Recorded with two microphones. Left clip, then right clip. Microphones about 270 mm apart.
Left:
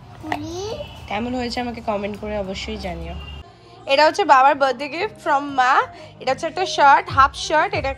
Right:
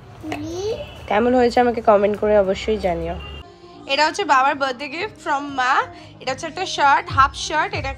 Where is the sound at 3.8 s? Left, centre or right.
Centre.